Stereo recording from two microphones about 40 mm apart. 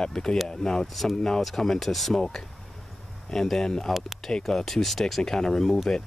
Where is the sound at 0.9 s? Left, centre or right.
Centre.